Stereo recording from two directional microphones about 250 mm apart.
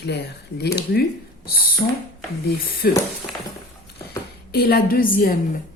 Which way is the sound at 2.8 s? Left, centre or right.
Left.